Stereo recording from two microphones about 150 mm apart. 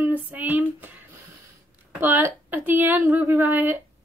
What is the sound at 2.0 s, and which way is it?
A woman's voice, 15° right (ahead or behind).